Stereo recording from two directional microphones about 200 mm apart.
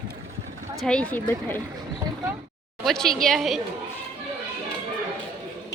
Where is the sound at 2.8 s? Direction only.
Centre (ahead or behind).